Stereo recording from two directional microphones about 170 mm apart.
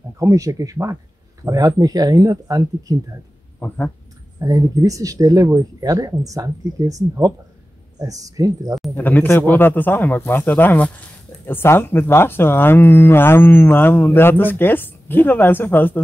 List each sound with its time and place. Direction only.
0.2 s speech: 20° right (ahead or behind)
3.5 s speech: 10° left (ahead or behind)
4.4 s speech: 20° right (ahead or behind)
8.9 s speech: 10° left (ahead or behind)